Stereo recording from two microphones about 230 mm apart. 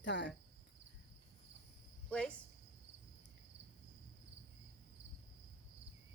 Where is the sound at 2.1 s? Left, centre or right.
Centre.